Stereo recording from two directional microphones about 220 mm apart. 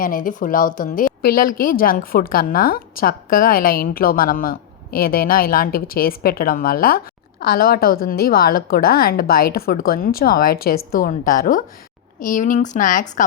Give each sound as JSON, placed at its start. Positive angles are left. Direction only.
{"t": 0.0, "sound": "a woman's voice", "side_deg": 40}